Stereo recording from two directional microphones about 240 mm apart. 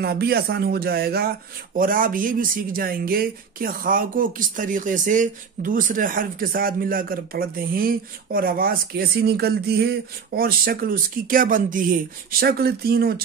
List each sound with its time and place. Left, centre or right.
0.0 s speech: right